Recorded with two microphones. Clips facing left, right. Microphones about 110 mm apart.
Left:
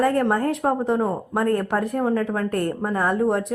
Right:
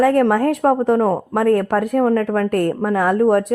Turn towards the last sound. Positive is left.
turn(degrees=-70)  # may be behind; listen again after turning